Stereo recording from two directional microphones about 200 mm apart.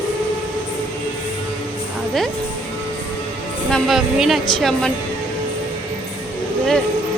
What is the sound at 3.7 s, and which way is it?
Speech, centre (ahead or behind).